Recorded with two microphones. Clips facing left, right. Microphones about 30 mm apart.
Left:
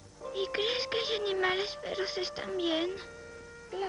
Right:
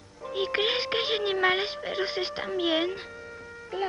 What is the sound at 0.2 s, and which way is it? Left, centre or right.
Speech, right.